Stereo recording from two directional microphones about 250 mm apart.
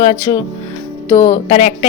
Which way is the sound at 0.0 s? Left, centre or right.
Centre.